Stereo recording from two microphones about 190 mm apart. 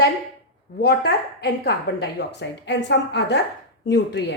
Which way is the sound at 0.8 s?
55° left (ahead or behind).